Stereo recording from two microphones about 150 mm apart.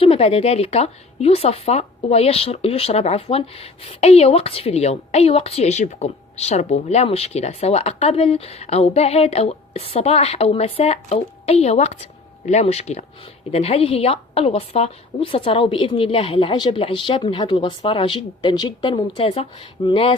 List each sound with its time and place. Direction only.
0.0 s a woman's voice: 40° left (ahead or behind)